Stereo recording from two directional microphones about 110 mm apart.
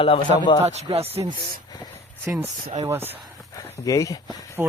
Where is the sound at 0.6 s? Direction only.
70° right (ahead or behind).